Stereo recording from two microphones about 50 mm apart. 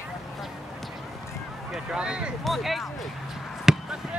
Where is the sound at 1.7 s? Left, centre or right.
Centre.